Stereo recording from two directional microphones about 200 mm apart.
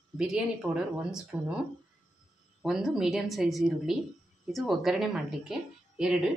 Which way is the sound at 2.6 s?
Centre (ahead or behind).